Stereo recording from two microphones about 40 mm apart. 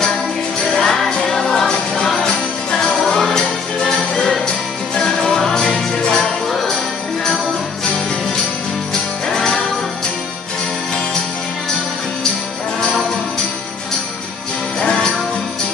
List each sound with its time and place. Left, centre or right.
0.7 s music: centre
2.2 s jingle bell: centre
3.1 s music: centre
9.3 s music: centre
14.8 s music: left